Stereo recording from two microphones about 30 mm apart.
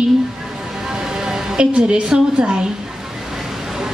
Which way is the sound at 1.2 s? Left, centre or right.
Centre.